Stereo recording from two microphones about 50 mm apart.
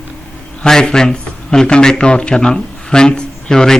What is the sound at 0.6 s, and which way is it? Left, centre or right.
A man's voice, centre.